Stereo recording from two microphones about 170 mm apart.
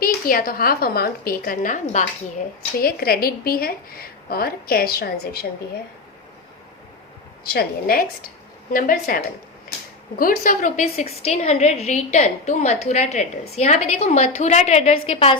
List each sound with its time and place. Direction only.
0.0 s a woman's voice: 55° left (ahead or behind)
2.7 s a woman's voice: 65° left (ahead or behind)
7.5 s a woman's voice: 60° left (ahead or behind); by 15.4 s 35° left (ahead or behind)